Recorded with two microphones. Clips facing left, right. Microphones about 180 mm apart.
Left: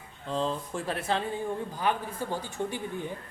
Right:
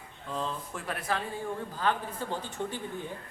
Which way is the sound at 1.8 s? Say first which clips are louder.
Even; 15° left (ahead or behind).